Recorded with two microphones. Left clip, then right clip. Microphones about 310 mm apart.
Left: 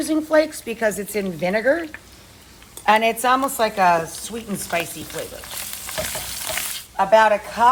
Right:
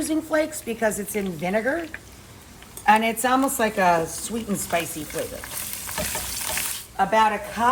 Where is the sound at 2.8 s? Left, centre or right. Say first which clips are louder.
Left 2 dB; left.